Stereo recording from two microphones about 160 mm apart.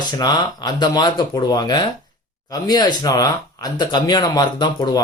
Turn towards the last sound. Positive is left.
turn(degrees=25)  # may be behind; listen again after turning